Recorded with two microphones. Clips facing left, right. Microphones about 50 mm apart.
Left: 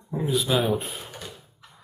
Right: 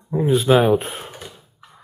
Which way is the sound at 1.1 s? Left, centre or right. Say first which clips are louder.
Right 2 dB; right.